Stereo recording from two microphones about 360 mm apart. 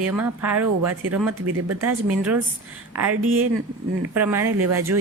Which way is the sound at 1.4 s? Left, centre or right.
Right.